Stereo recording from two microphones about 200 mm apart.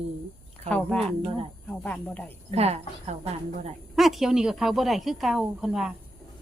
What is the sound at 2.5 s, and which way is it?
A woman's voice, 30° right (ahead or behind).